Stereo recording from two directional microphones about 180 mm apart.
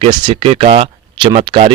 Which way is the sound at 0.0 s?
25° right (ahead or behind).